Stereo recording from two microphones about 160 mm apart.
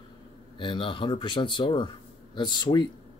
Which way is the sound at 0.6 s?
30° left (ahead or behind).